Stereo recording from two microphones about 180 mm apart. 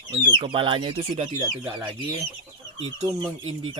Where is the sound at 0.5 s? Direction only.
25° right (ahead or behind).